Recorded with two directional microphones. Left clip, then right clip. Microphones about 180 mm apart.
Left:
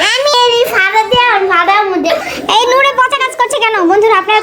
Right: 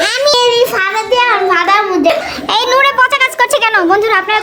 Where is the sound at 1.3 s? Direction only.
15° left (ahead or behind).